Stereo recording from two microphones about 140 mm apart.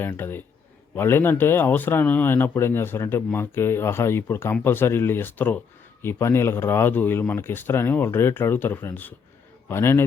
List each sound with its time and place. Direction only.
0.0 s speech: 15° left (ahead or behind)